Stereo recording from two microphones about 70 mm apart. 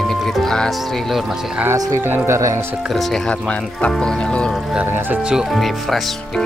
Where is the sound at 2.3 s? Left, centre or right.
Right.